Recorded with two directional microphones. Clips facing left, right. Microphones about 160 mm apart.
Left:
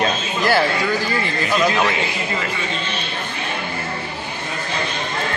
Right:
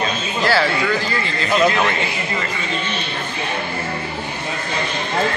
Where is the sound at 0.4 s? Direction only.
15° left (ahead or behind).